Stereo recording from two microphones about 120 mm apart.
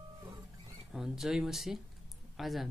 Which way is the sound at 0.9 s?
5° right (ahead or behind).